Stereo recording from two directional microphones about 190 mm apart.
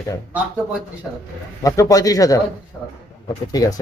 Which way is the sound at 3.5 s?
20° left (ahead or behind).